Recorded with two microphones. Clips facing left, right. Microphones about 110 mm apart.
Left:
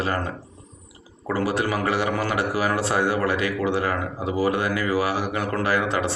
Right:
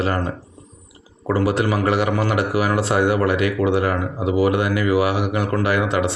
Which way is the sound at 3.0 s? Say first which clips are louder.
Right 4 dB; 30° left (ahead or behind).